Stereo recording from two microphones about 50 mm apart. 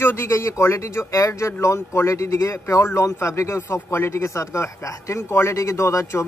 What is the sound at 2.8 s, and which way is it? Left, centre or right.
Speech, left.